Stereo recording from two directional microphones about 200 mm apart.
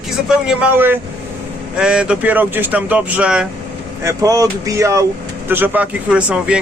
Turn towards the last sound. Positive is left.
turn(degrees=-5)  # may be behind; listen again after turning